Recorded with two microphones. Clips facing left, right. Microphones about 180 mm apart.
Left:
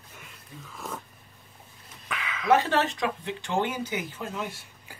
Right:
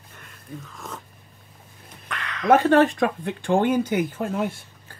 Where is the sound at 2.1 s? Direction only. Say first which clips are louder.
Right 3 dB; 5° left (ahead or behind).